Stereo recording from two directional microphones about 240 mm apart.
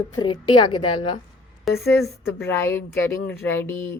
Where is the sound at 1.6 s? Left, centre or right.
Centre.